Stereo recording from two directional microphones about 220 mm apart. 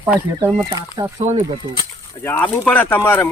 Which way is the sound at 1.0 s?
25° right (ahead or behind).